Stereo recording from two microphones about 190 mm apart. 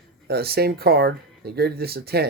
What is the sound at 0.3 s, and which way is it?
Speech, 55° right (ahead or behind).